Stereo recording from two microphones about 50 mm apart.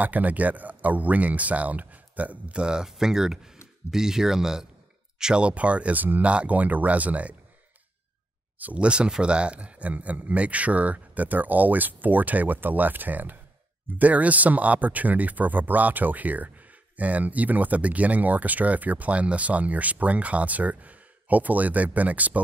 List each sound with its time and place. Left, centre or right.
0.0 s speech: right
2.6 s speech: centre; by 7.3 s right
8.7 s speech: right